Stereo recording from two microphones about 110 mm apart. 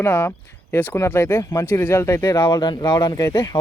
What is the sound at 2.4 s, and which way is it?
Speech, 40° left (ahead or behind).